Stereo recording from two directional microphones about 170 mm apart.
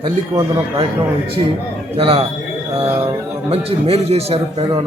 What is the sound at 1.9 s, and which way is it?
Speech, 35° right (ahead or behind).